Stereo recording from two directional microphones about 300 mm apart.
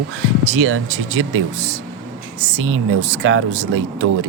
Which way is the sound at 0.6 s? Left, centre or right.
Right.